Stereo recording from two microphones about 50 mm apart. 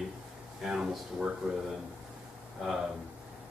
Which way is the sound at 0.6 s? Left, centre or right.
Centre.